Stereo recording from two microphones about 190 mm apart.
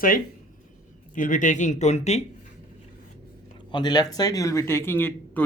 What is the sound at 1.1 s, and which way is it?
Speech, 45° left (ahead or behind).